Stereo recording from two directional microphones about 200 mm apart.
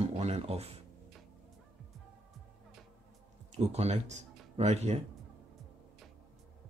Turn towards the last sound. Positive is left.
turn(degrees=-35)  # may be behind; listen again after turning